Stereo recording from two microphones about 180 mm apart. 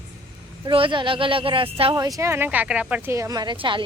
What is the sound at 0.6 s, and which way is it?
Speech, 30° right (ahead or behind).